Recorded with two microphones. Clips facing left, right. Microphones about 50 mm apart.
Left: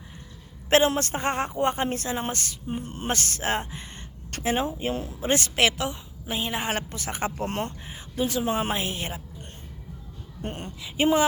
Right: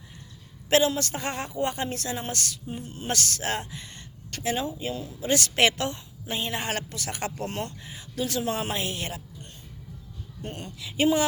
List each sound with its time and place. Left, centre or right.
0.7 s speech: left
2.6 s speech: left
3.1 s speech: left
5.5 s a woman's voice: centre; by 7.4 s left
7.4 s speech: left
10.4 s speech: left